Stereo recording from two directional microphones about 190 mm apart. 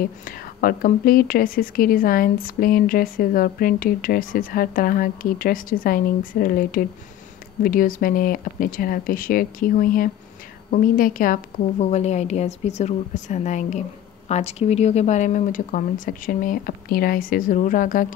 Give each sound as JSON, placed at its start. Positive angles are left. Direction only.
{"t": 0.0, "sound": "a woman's voice", "side_deg": 50}
{"t": 11.8, "sound": "a woman's voice", "side_deg": 35}